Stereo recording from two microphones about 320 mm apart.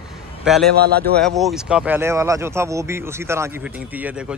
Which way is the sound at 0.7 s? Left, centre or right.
Right.